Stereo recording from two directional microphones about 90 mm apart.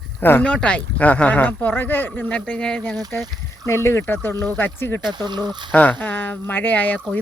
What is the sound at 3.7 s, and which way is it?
Speech, 30° left (ahead or behind).